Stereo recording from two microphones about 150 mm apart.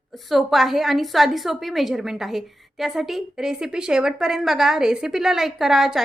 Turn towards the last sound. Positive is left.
turn(degrees=0)  # may be behind; listen again after turning